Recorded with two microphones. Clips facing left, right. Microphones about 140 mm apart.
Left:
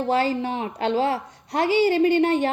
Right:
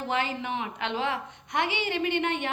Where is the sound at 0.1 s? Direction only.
35° left (ahead or behind).